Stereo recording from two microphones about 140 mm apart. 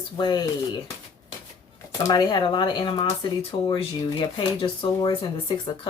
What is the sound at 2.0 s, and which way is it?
A woman's voice, 30° left (ahead or behind).